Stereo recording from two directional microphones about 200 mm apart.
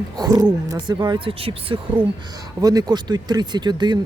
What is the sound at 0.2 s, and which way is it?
Speech, 20° right (ahead or behind).